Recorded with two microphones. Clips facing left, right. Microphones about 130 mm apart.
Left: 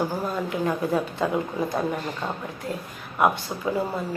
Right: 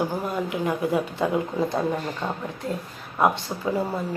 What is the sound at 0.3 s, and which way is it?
Speech, 15° right (ahead or behind).